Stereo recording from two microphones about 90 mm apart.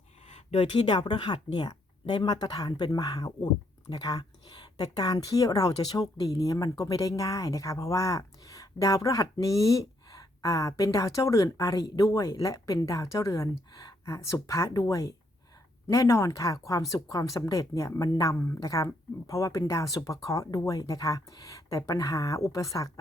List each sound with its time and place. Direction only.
0.7 s speech: 60° left (ahead or behind); by 22.9 s 35° left (ahead or behind)